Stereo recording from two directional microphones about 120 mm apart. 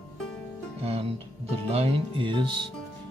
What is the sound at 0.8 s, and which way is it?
Speech, 55° right (ahead or behind).